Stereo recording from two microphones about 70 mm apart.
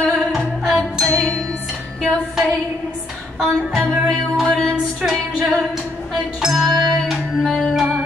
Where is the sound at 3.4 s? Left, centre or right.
Centre.